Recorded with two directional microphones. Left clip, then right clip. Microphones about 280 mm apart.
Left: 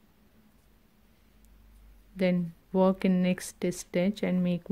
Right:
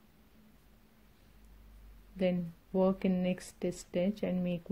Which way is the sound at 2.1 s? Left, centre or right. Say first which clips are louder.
Left 4 dB; centre.